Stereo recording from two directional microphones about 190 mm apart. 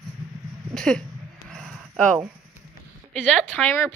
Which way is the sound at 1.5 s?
Centre (ahead or behind).